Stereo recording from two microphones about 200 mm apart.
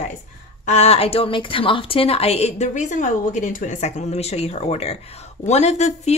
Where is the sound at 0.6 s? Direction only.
35° left (ahead or behind).